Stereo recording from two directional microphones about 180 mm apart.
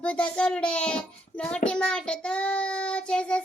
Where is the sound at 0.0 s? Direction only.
5° left (ahead or behind).